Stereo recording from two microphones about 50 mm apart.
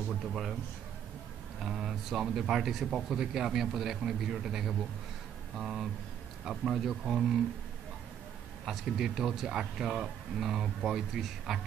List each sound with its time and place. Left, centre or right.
0.1 s speech: centre
1.6 s speech: centre
8.6 s speech: centre